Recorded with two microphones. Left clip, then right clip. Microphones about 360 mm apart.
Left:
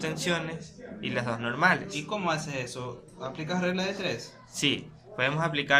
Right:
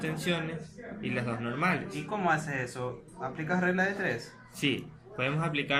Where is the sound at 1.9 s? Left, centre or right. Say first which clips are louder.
Right 1 dB; centre.